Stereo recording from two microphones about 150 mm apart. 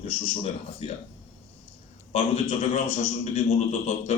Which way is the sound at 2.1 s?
40° left (ahead or behind).